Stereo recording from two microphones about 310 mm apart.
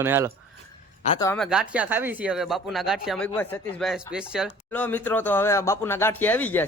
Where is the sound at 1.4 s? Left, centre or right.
Centre.